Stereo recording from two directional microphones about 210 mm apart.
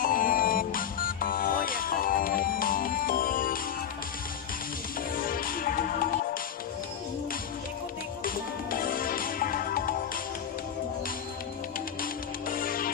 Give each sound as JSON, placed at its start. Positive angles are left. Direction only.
{"t": 0.0, "sound": "music", "side_deg": 45}
{"t": 5.1, "sound": "music", "side_deg": 40}
{"t": 8.2, "sound": "music", "side_deg": 45}
{"t": 12.0, "sound": "music", "side_deg": 40}